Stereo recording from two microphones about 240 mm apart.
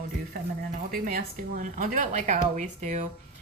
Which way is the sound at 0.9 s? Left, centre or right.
Right.